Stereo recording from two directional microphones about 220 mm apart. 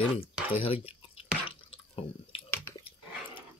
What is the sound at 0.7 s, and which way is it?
Drip, 25° left (ahead or behind).